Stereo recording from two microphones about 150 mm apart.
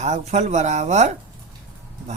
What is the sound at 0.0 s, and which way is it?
Speech, 50° right (ahead or behind).